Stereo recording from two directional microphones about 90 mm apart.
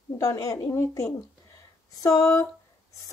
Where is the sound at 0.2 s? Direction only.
40° left (ahead or behind).